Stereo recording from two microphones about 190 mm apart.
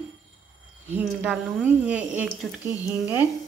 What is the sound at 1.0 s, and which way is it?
Speech, 5° right (ahead or behind).